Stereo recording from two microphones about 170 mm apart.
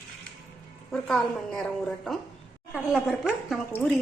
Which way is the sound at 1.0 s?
Centre (ahead or behind).